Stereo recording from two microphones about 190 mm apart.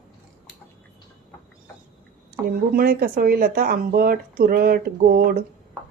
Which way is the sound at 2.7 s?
50° right (ahead or behind).